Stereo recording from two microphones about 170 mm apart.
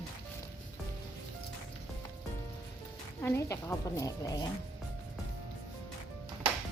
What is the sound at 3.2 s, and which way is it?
Speech, 15° left (ahead or behind).